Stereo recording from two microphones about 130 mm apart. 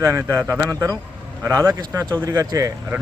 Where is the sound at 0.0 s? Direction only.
25° right (ahead or behind).